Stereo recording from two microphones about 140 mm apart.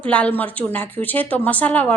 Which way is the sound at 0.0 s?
10° left (ahead or behind).